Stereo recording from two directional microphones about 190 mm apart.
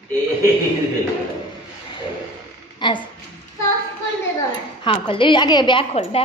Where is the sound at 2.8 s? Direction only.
25° left (ahead or behind).